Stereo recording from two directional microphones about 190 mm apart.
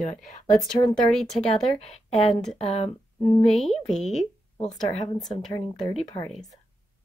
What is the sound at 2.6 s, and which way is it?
Speech, 35° left (ahead or behind).